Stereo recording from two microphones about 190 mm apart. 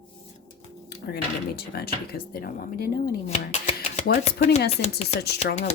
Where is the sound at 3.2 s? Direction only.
35° left (ahead or behind).